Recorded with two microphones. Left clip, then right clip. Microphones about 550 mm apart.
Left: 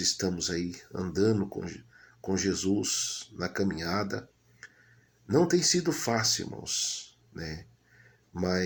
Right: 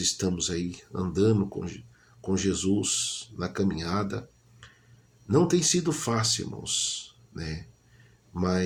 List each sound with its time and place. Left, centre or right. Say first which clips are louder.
0.0 s speech: right 1 dB; right
5.3 s speech: right 1 dB; right